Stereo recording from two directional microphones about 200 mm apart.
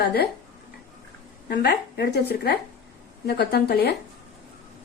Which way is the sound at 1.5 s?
55° left (ahead or behind).